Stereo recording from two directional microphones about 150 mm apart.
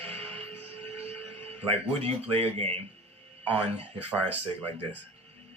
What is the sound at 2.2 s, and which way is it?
Speech, 40° right (ahead or behind).